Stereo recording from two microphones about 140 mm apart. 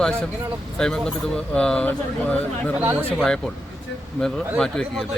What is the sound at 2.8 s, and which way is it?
Speech, 15° right (ahead or behind).